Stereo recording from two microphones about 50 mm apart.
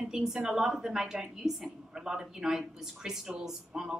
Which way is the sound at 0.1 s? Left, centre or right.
Centre.